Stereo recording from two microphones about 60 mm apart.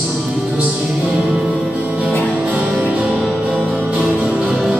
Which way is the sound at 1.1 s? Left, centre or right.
Centre.